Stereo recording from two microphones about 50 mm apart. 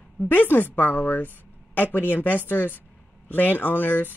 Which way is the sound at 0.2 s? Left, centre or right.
Left.